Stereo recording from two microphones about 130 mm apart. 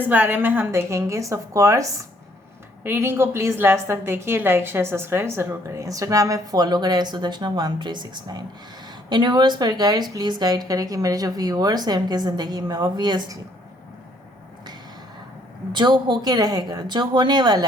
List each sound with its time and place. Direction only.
0.0 s a woman's voice: 15° right (ahead or behind); by 13.4 s 30° right (ahead or behind)
15.7 s a woman's voice: 35° right (ahead or behind)